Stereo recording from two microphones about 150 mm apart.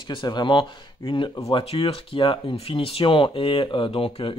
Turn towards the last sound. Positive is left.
turn(degrees=35)  # may be behind; listen again after turning